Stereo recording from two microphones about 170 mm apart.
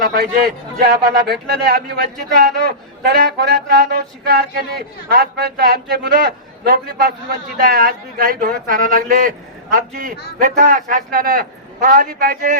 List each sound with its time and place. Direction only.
0.0 s a man's voice: 65° right (ahead or behind)